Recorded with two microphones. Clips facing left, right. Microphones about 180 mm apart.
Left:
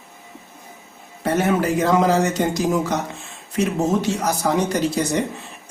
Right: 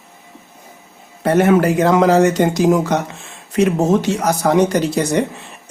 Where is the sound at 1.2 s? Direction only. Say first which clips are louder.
Right 6 dB; 70° right (ahead or behind).